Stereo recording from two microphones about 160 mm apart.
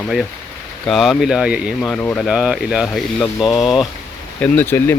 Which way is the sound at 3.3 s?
25° left (ahead or behind).